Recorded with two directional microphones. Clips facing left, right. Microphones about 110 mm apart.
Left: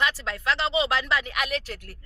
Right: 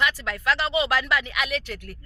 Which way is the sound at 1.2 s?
40° left (ahead or behind).